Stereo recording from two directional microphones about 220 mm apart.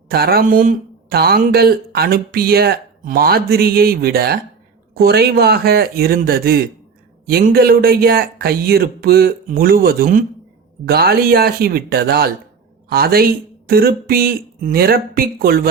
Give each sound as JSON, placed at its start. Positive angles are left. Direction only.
{"t": 0.1, "sound": "speech", "side_deg": -45}